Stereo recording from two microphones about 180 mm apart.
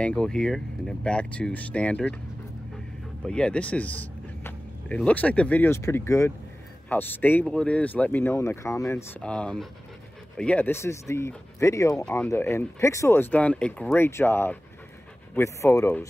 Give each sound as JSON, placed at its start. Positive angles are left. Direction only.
{"t": 0.0, "sound": "speech", "side_deg": 5}
{"t": 3.3, "sound": "speech", "side_deg": 5}